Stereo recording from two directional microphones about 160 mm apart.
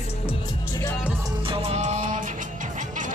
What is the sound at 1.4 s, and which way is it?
Music, 35° right (ahead or behind).